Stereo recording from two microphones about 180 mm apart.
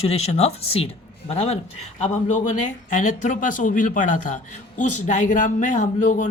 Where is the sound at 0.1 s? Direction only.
35° left (ahead or behind).